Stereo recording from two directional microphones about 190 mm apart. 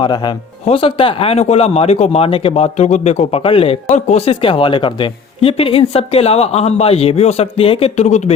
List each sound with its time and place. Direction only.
0.0 s speech: 25° left (ahead or behind)